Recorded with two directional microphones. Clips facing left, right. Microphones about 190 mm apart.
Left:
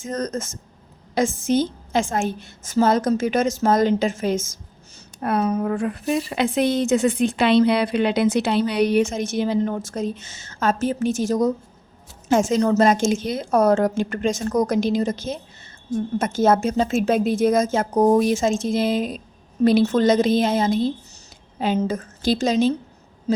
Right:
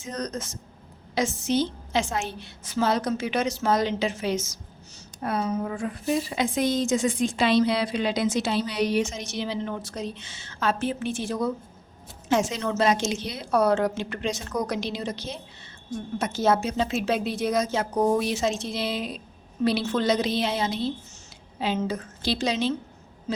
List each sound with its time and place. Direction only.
0.0 s a woman's voice: 50° left (ahead or behind)
5.2 s a woman's voice: 60° left (ahead or behind); by 22.7 s 45° left (ahead or behind)